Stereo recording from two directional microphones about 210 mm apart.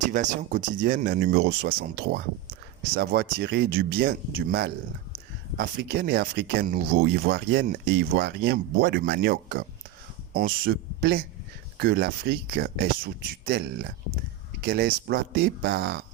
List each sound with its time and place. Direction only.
0.1 s speech: 40° right (ahead or behind)